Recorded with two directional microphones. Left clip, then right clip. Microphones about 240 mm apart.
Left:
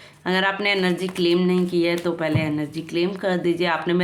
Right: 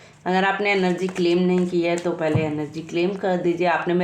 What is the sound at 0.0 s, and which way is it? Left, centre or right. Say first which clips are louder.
Speech: right 1 dB; left.